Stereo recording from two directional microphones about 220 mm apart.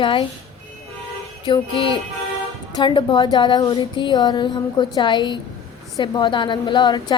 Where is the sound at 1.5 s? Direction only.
20° left (ahead or behind).